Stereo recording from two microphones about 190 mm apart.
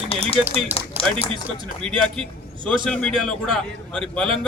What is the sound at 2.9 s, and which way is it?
A man's voice, 5° left (ahead or behind).